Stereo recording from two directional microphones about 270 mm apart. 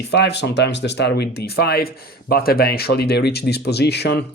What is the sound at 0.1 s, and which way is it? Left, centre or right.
Speech, left.